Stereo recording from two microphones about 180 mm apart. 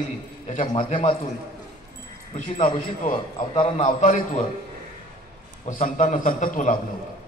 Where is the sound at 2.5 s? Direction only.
35° left (ahead or behind).